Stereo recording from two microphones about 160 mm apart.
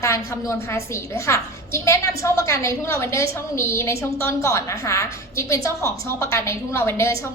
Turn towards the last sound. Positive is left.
turn(degrees=15)  # may be behind; listen again after turning